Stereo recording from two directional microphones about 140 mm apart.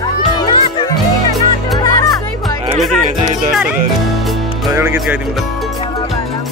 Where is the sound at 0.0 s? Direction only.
30° left (ahead or behind).